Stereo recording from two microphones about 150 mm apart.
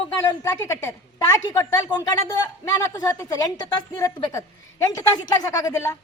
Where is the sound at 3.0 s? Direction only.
25° left (ahead or behind).